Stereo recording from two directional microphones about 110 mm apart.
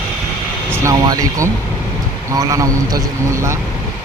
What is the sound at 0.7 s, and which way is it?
A man's voice, 30° right (ahead or behind).